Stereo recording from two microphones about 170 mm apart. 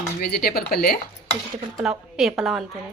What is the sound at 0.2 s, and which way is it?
Speech, 65° left (ahead or behind).